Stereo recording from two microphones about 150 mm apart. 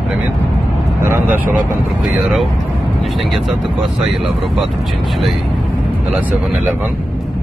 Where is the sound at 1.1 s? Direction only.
15° right (ahead or behind).